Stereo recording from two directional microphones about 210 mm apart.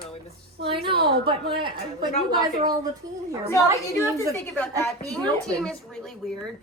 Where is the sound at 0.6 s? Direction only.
50° right (ahead or behind).